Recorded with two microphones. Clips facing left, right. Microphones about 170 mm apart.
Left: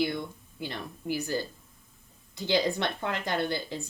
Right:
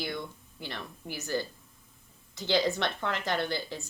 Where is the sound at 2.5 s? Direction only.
15° left (ahead or behind).